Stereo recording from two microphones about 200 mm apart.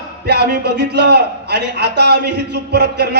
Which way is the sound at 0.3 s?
55° right (ahead or behind).